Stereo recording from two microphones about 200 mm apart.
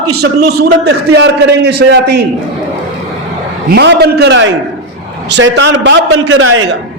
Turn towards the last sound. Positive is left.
turn(degrees=-85)